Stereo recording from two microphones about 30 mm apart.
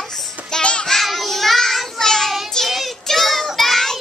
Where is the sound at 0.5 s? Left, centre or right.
Left.